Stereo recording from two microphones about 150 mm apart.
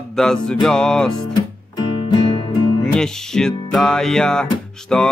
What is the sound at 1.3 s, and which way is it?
Music, 30° left (ahead or behind).